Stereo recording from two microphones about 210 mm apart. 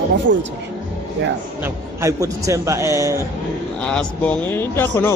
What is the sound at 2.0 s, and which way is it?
A man's voice, 15° right (ahead or behind).